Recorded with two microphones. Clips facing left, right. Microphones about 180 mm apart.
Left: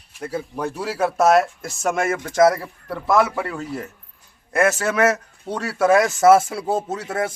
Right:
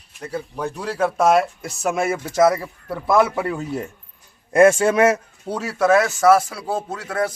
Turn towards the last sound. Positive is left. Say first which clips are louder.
# even
turn(degrees=25)  # may be behind; listen again after turning